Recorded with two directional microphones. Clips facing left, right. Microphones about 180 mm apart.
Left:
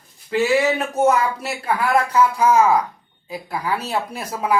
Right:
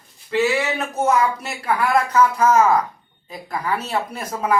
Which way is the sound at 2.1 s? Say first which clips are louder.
Even; 10° left (ahead or behind).